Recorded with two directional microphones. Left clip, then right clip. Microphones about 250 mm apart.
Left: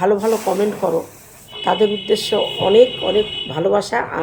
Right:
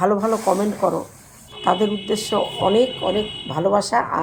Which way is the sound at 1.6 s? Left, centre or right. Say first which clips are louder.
Left 3 dB; centre.